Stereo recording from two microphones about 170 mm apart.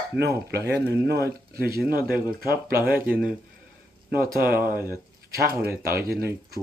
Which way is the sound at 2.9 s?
10° right (ahead or behind).